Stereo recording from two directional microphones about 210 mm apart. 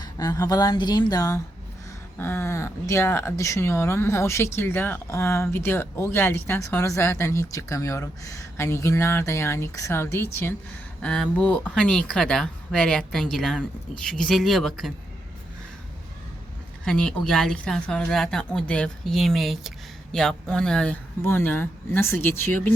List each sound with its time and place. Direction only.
0.0 s a woman's voice: 15° left (ahead or behind); by 14.9 s centre (ahead or behind)
16.8 s a woman's voice: 5° left (ahead or behind)